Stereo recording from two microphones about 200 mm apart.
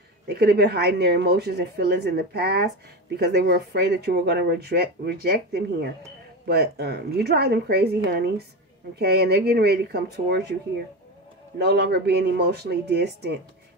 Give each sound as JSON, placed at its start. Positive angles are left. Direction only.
{"t": 0.3, "sound": "speech", "side_deg": -55}
{"t": 11.5, "sound": "speech", "side_deg": -55}